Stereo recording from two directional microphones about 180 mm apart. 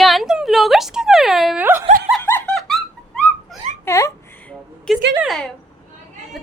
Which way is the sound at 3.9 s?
15° left (ahead or behind).